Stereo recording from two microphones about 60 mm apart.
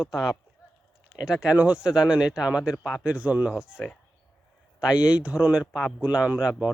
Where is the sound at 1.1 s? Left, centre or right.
Centre.